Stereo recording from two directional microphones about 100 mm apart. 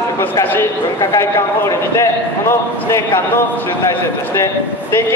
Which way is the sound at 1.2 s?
30° left (ahead or behind).